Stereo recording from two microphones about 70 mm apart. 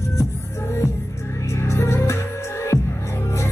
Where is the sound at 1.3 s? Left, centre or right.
Left.